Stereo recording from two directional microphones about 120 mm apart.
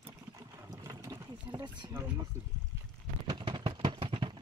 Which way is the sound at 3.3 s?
40° right (ahead or behind).